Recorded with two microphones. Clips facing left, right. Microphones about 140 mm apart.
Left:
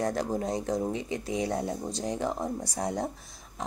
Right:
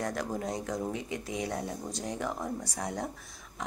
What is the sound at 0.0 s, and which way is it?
Speech, 35° left (ahead or behind).